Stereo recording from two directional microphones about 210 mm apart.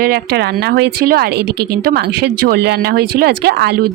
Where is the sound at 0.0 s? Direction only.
50° right (ahead or behind).